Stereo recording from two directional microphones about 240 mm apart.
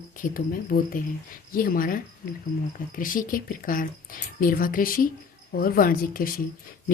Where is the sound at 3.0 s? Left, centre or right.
Left.